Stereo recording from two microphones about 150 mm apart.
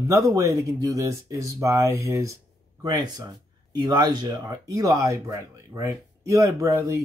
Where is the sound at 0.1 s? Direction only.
20° right (ahead or behind).